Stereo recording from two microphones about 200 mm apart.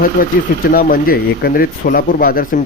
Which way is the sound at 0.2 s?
45° left (ahead or behind).